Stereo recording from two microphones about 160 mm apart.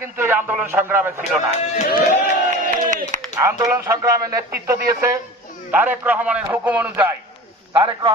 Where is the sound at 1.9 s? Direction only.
65° left (ahead or behind).